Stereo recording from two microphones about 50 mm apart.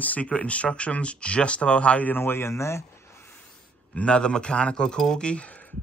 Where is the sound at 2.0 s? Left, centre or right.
Left.